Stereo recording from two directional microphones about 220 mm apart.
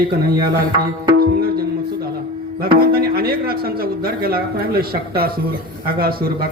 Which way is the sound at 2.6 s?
45° right (ahead or behind).